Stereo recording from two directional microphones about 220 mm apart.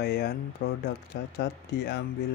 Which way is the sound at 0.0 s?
45° left (ahead or behind).